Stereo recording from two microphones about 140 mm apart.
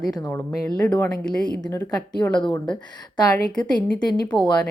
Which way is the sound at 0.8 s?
10° left (ahead or behind).